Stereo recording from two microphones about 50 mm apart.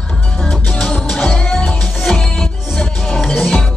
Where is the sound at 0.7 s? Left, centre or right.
Centre.